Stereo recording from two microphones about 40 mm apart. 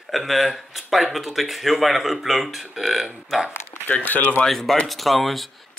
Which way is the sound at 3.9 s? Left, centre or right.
Left.